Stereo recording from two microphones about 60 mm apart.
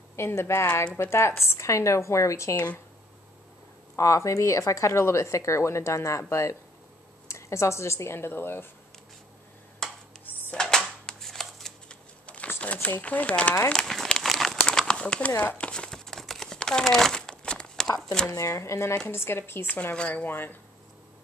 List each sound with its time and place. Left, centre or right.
0.1 s a woman's voice: left
2.5 s speech: left
3.9 s a woman's voice: left
7.2 s speech: left
9.8 s a sound: centre
10.5 s shuffling cards: centre
12.3 s a sound: left
12.7 s speech: left
13.7 s crumpling: centre
14.6 s crumpling: centre
18.5 s speech: left
19.0 s speech: left
20.2 s speech: left